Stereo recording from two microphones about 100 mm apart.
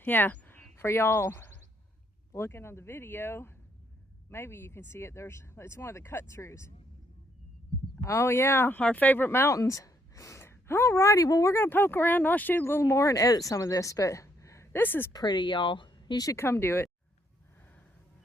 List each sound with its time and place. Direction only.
0.0 s speech: 20° left (ahead or behind)
8.0 s speech: 30° left (ahead or behind)
11.5 s speech: 20° left (ahead or behind)
15.1 s speech: 45° left (ahead or behind)
16.2 s speech: 25° left (ahead or behind)